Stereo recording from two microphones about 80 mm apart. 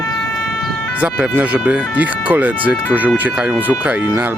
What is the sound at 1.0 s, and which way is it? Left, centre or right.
Speech, centre.